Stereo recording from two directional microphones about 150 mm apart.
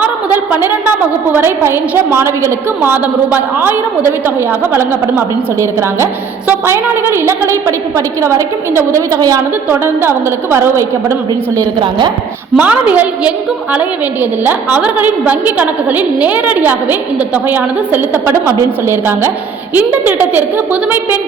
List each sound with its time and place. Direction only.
0.0 s a woman's voice: 10° right (ahead or behind)
11.8 s a woman's voice: 30° right (ahead or behind)
12.5 s a woman's voice: 10° right (ahead or behind)